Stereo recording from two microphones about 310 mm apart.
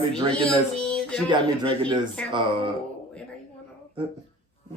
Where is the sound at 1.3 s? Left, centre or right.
Centre.